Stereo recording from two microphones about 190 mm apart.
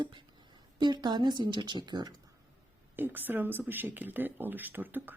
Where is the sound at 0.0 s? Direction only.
25° right (ahead or behind).